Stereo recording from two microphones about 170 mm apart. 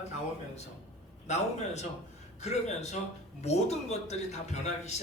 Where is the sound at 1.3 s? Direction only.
40° left (ahead or behind).